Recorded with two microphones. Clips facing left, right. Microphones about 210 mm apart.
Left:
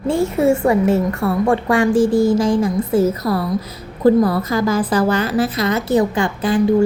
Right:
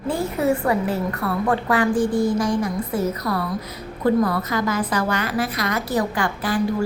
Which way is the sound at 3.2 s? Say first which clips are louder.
Left 5 dB; 35° left (ahead or behind).